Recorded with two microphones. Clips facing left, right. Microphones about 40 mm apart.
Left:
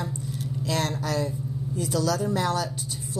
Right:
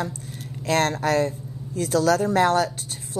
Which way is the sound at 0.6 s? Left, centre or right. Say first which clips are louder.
Right 7 dB; right.